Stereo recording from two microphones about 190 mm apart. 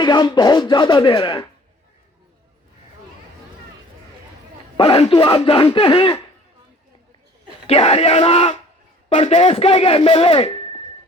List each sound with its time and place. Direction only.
0.0 s speech: 25° left (ahead or behind)
4.8 s speech: 30° left (ahead or behind)
7.7 s speech: 30° left (ahead or behind)